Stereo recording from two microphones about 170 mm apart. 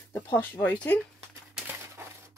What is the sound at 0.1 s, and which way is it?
Speech, 10° left (ahead or behind).